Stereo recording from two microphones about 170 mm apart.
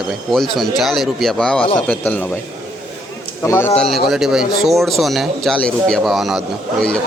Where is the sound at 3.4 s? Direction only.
15° left (ahead or behind).